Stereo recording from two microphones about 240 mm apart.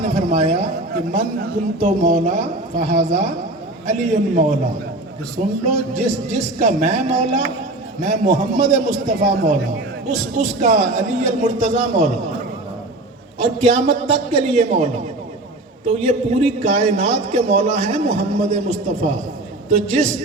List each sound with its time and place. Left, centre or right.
0.0 s a sound: right
1.8 s a man's voice: right
13.4 s a man's voice: right